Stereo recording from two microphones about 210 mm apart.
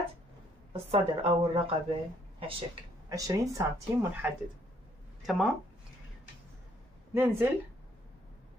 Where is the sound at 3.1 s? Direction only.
15° right (ahead or behind).